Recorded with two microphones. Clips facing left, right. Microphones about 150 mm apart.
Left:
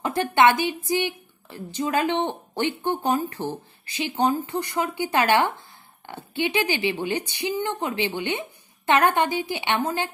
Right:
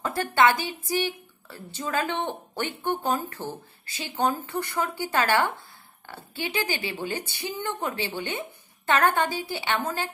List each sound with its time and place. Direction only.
0.0 s a woman's voice: 20° left (ahead or behind)